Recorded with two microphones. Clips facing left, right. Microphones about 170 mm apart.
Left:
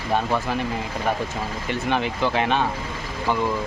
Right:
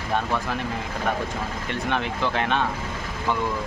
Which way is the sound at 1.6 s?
5° left (ahead or behind).